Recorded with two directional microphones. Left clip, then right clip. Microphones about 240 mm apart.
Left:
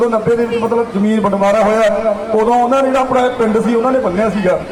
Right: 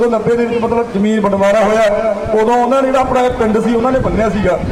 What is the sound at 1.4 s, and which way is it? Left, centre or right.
Speech, right.